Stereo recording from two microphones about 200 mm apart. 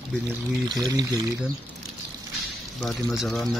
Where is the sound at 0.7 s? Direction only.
20° right (ahead or behind).